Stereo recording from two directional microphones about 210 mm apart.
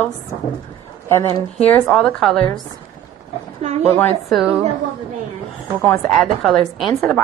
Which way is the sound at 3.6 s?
30° right (ahead or behind).